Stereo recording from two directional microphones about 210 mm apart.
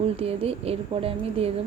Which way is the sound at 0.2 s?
30° right (ahead or behind).